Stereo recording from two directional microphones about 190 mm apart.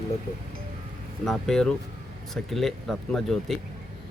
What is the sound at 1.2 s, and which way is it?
Speech, centre (ahead or behind).